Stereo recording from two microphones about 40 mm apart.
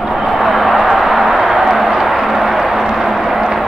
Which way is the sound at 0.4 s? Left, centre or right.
Centre.